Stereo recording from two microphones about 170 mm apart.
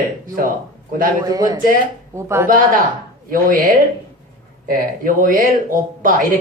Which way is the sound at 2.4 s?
55° right (ahead or behind).